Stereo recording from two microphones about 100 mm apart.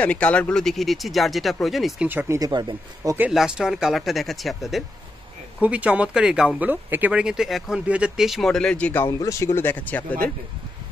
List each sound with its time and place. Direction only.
0.0 s speech: 10° left (ahead or behind)
2.0 s speech: 20° right (ahead or behind)
2.3 s speech: 35° right (ahead or behind)
3.3 s speech: 5° right (ahead or behind)
5.6 s speech: 15° right (ahead or behind); by 9.0 s 10° left (ahead or behind)
9.0 s speech: 30° left (ahead or behind); by 10.3 s 15° left (ahead or behind)